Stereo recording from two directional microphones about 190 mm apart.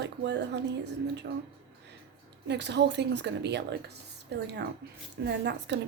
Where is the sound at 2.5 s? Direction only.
65° right (ahead or behind).